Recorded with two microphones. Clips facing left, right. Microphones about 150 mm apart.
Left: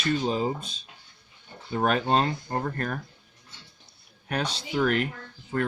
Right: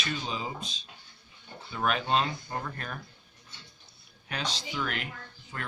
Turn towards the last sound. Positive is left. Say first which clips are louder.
# left 12 dB
turn(degrees=50)  # may be behind; listen again after turning